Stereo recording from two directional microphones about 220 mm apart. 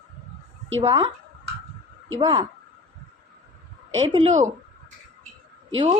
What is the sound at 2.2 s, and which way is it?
Speech, 20° right (ahead or behind).